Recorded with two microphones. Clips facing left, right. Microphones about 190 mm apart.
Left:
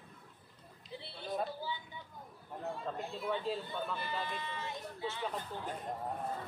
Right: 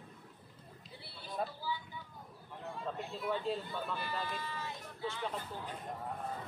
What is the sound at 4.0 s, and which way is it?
Speech, 20° left (ahead or behind).